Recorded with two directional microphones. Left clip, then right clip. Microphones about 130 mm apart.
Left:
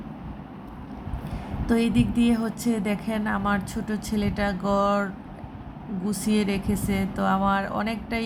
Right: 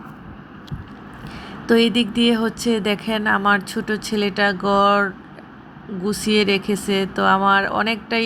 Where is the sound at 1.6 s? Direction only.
25° right (ahead or behind).